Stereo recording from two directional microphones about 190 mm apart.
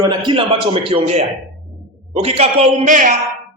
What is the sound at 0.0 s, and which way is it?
A man's voice, 25° right (ahead or behind).